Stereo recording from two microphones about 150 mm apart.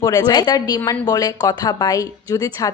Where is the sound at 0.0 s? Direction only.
25° left (ahead or behind).